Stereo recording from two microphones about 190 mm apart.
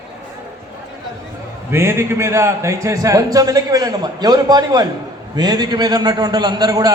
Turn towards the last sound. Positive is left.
turn(degrees=-20)  # may be behind; listen again after turning